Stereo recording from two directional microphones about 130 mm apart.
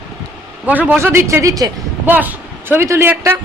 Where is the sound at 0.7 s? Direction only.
10° right (ahead or behind).